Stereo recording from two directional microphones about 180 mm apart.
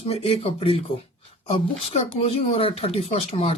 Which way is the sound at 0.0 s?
35° left (ahead or behind).